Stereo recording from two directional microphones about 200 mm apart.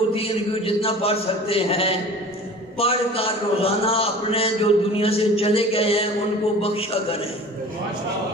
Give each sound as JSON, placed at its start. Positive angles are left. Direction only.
{"t": 0.1, "sound": "a man's voice", "side_deg": 30}